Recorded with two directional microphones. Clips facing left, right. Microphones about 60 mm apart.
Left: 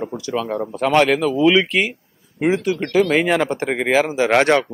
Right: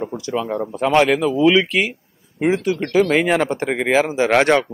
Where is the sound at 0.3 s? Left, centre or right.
Centre.